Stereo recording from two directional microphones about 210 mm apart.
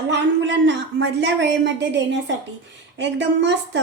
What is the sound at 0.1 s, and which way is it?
A woman's voice, 55° right (ahead or behind).